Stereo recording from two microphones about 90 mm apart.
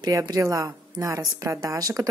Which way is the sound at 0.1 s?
35° right (ahead or behind).